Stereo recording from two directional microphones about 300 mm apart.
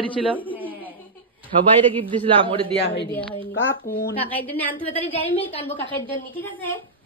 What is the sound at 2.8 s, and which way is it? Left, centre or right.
Speech, left.